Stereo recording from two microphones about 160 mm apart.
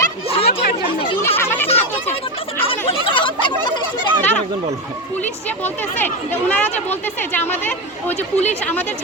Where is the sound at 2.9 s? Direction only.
30° left (ahead or behind).